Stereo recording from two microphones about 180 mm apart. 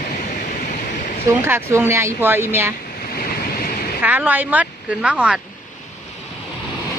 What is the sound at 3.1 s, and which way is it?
Waves, 55° left (ahead or behind).